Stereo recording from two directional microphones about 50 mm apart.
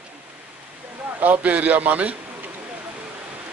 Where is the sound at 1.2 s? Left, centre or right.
Right.